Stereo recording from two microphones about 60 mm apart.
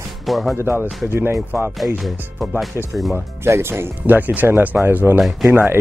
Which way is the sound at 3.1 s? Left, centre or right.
Right.